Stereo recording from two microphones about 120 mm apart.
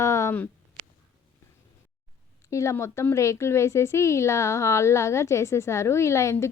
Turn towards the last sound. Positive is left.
turn(degrees=25)  # may be behind; listen again after turning